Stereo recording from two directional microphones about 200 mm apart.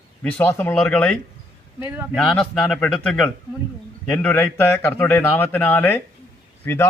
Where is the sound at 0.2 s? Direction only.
10° left (ahead or behind).